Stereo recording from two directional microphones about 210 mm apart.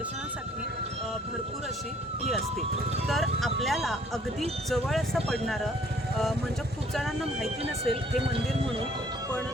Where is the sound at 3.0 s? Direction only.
Centre (ahead or behind).